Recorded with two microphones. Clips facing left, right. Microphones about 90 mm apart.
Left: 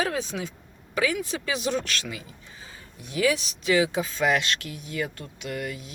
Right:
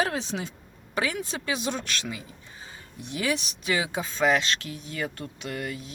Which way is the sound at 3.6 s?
25° right (ahead or behind).